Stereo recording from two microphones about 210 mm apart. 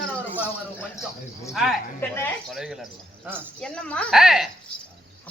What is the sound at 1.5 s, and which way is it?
Speech, centre (ahead or behind).